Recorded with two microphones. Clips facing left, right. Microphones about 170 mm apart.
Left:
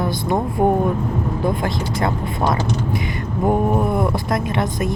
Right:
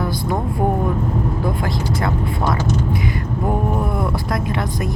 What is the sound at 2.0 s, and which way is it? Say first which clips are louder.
A woman's voice: left 3 dB; 20° left (ahead or behind).